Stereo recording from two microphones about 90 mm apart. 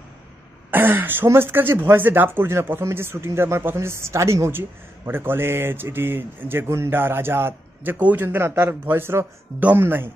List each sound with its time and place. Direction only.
0.7 s speech: 20° right (ahead or behind)